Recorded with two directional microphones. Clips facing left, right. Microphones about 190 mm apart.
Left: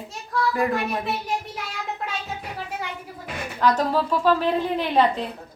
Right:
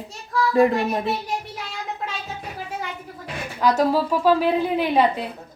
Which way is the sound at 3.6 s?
10° right (ahead or behind).